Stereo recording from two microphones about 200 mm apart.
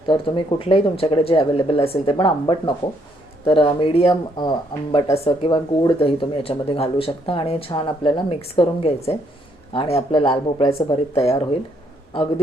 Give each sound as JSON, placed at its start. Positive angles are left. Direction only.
{"t": 0.1, "sound": "speech", "side_deg": 25}
{"t": 10.8, "sound": "speech", "side_deg": 15}
{"t": 11.2, "sound": "speech", "side_deg": 30}